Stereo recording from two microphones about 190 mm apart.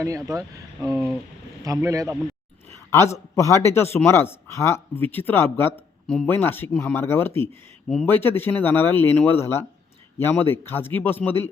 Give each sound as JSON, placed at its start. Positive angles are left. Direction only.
{"t": 0.3, "sound": "speech", "side_deg": -15}
{"t": 2.6, "sound": "a sound", "side_deg": 15}
{"t": 3.3, "sound": "speech", "side_deg": 15}